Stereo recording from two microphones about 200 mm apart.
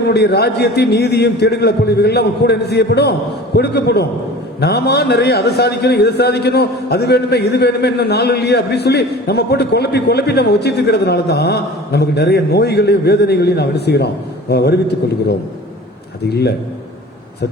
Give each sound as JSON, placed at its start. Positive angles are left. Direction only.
{"t": 0.0, "sound": "a man's voice", "side_deg": 55}
{"t": 16.3, "sound": "a man's voice", "side_deg": 55}